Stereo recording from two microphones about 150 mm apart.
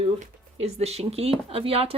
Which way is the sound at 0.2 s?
45° right (ahead or behind).